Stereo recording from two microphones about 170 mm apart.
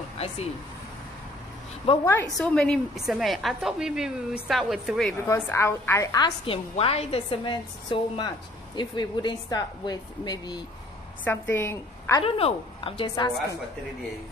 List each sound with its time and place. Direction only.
2.0 s a woman's voice: 15° left (ahead or behind)
2.3 s a woman's voice: 5° left (ahead or behind)
5.3 s a woman's voice: 15° left (ahead or behind)
11.2 s a woman's voice: 10° left (ahead or behind)
12.2 s a woman's voice: 35° left (ahead or behind)